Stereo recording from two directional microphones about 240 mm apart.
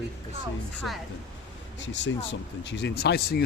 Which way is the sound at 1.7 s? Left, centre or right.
Left.